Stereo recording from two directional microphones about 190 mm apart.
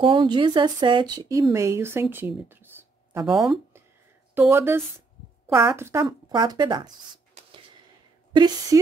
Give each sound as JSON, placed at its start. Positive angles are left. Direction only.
{"t": 0.0, "sound": "speech", "side_deg": -25}
{"t": 7.4, "sound": "a sound", "side_deg": -40}
{"t": 8.3, "sound": "a woman's voice", "side_deg": -20}